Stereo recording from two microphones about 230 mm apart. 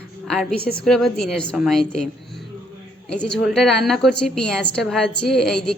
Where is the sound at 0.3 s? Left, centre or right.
Centre.